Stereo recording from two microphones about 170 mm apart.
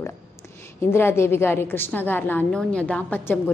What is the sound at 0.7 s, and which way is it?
A woman's voice, 15° left (ahead or behind).